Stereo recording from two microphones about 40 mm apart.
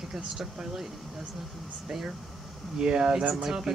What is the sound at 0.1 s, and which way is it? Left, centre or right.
Speech, centre.